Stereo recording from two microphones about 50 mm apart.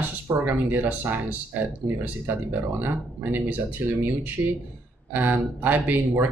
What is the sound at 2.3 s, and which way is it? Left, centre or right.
Speech, right.